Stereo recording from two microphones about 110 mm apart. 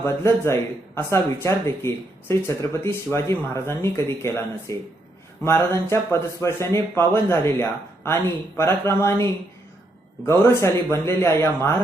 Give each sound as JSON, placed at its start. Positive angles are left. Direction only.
{"t": 0.0, "sound": "speech", "side_deg": 20}